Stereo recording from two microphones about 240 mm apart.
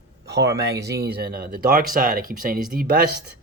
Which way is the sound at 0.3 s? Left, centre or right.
Right.